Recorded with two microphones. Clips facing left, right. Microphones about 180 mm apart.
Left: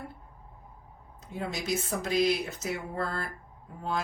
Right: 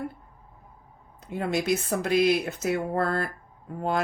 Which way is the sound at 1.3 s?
60° right (ahead or behind).